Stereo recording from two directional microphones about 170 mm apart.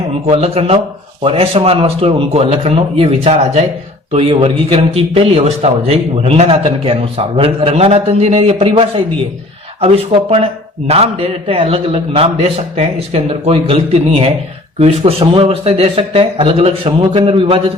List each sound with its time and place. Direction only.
0.3 s a man's voice: 35° right (ahead or behind)
14.8 s a man's voice: 35° right (ahead or behind)